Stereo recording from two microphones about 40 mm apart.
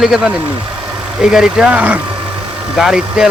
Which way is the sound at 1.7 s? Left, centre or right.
Right.